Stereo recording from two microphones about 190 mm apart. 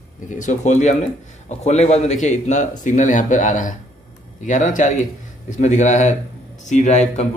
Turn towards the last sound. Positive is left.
turn(degrees=35)  # may be behind; listen again after turning